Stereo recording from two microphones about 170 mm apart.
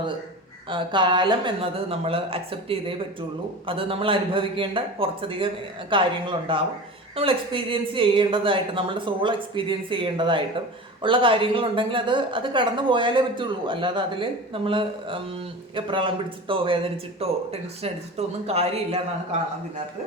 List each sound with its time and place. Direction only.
0.7 s a man's voice: 30° right (ahead or behind)